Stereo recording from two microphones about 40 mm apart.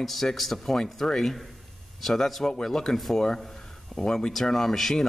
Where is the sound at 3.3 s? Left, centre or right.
Centre.